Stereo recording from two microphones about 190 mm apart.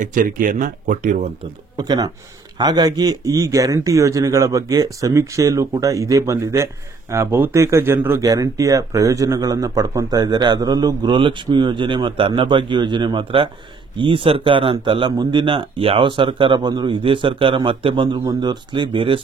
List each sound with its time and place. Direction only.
0.0 s speech: 45° right (ahead or behind)
1.8 s speech: 20° right (ahead or behind)